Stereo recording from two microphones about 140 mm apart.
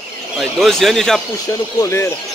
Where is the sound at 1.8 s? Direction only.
20° left (ahead or behind).